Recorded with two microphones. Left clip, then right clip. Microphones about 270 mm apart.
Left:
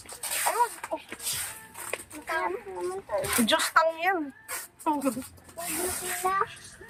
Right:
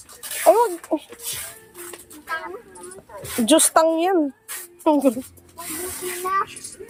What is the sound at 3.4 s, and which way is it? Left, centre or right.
Speech, right.